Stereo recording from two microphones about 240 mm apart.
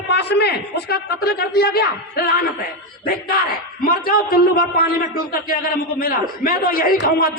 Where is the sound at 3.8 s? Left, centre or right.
Left.